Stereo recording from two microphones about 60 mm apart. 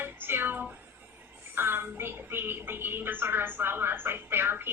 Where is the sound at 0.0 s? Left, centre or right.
Right.